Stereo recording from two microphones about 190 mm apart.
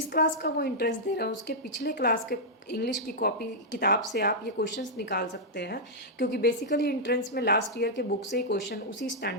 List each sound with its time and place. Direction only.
0.1 s a woman's voice: 60° left (ahead or behind)
1.9 s a woman's voice: 50° left (ahead or behind)